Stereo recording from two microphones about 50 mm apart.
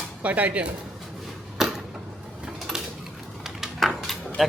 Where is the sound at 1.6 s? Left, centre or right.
Centre.